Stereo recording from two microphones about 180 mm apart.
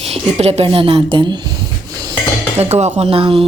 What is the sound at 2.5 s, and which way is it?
Speech, 35° right (ahead or behind).